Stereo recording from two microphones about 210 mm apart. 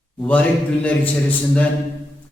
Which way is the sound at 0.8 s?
5° left (ahead or behind).